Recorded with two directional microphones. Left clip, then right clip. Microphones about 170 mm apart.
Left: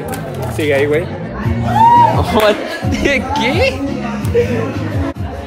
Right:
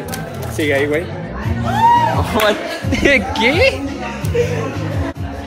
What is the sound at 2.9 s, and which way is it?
Speech, 5° left (ahead or behind).